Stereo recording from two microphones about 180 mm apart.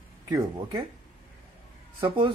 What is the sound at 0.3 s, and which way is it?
Speech, 20° right (ahead or behind).